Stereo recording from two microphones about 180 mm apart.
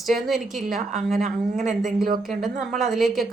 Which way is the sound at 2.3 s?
Centre (ahead or behind).